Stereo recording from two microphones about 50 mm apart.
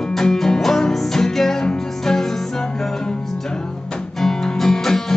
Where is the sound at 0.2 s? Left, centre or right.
Centre.